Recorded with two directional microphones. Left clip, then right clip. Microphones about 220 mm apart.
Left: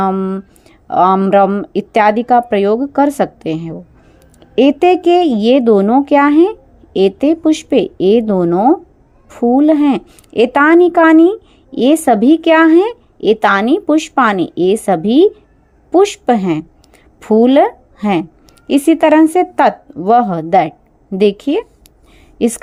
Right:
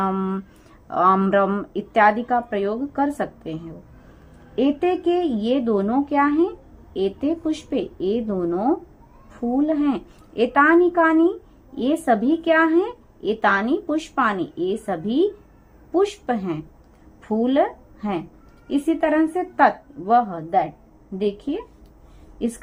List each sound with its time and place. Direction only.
0.0 s a woman's voice: 20° left (ahead or behind); by 21.6 s 35° left (ahead or behind)